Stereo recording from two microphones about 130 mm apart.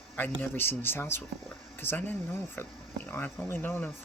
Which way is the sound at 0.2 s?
15° left (ahead or behind).